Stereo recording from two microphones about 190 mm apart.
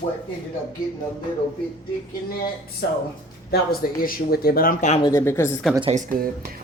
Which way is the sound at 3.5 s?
55° left (ahead or behind).